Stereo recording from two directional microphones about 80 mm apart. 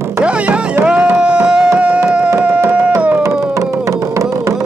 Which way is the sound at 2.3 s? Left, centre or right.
Centre.